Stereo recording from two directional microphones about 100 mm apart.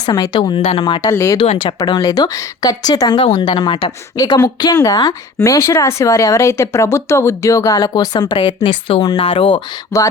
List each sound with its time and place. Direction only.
0.0 s speech: 40° left (ahead or behind)
0.5 s a woman's voice: 80° left
1.1 s speech: 30° left (ahead or behind)
1.4 s a woman's voice: 60° left (ahead or behind)
2.0 s speech: 40° left (ahead or behind)
3.2 s a woman's voice: 80° left
3.4 s speech: 50° left (ahead or behind)
8.4 s a woman's voice: 60° left (ahead or behind)
9.9 s speech: 30° left (ahead or behind)